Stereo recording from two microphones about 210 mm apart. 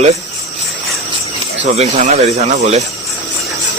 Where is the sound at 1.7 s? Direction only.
30° right (ahead or behind).